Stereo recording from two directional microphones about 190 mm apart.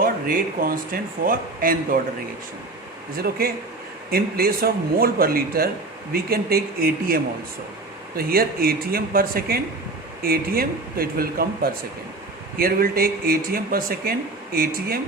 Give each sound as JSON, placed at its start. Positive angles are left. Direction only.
{"t": 0.0, "sound": "a man's voice", "side_deg": -50}
{"t": 3.2, "sound": "a man's voice", "side_deg": -50}